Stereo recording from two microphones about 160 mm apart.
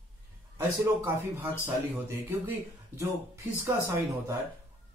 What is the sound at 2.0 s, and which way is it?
A man's voice, 15° right (ahead or behind).